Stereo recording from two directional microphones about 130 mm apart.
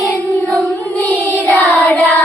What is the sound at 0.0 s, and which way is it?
Music, 20° left (ahead or behind).